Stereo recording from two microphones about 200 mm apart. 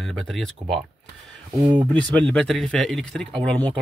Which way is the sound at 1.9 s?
5° left (ahead or behind).